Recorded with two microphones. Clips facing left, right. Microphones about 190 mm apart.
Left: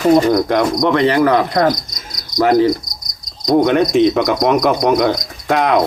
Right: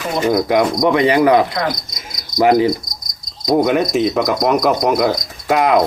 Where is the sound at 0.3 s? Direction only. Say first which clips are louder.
Even; 5° right (ahead or behind).